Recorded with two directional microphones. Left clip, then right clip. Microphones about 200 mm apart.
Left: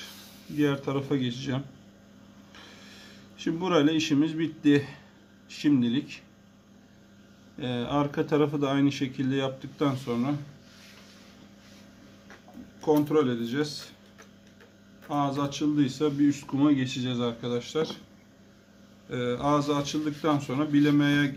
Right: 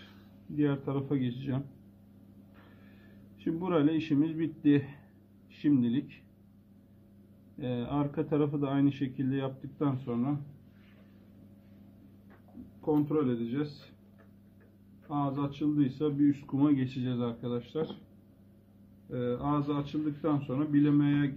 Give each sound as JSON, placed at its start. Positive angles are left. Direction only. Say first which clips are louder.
{"t": 0.6, "sound": "speech", "louder": "left 4 dB", "side_deg": 5}
{"t": 3.3, "sound": "speech", "louder": "left 5 dB", "side_deg": 10}
{"t": 7.5, "sound": "speech", "louder": "left 5 dB", "side_deg": 15}
{"t": 12.8, "sound": "speech", "louder": "left 6 dB", "side_deg": 20}
{"t": 15.0, "sound": "speech", "louder": "left 5 dB", "side_deg": 15}
{"t": 16.3, "sound": "speech", "louder": "left 3 dB", "side_deg": -5}
{"t": 19.0, "sound": "speech", "louder": "left 5 dB", "side_deg": 20}